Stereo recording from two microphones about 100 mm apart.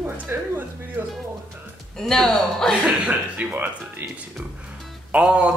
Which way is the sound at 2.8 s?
15° right (ahead or behind).